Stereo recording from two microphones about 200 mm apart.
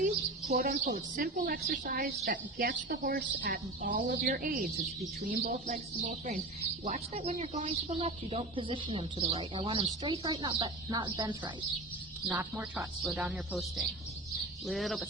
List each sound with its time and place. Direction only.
0.0 s a woman's voice: 40° right (ahead or behind); by 11.5 s 25° right (ahead or behind)
12.3 s speech: 10° right (ahead or behind)